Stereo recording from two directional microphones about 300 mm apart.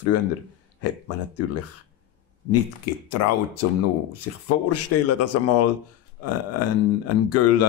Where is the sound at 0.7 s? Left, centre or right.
Left.